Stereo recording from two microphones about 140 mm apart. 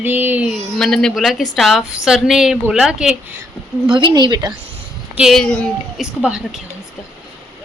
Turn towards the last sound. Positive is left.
turn(degrees=-5)  # may be behind; listen again after turning